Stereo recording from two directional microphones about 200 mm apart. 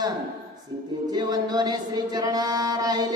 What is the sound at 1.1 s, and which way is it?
Chant, 20° right (ahead or behind).